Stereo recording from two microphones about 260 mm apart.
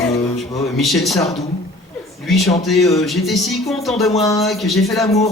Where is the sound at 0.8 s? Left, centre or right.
Centre.